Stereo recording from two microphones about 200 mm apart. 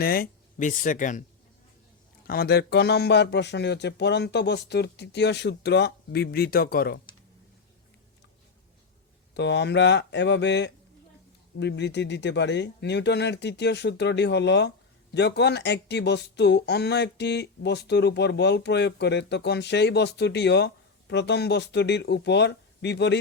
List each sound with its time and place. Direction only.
0.0 s speech: 50° left (ahead or behind)
2.2 s speech: 50° left (ahead or behind)
9.3 s speech: 60° left (ahead or behind)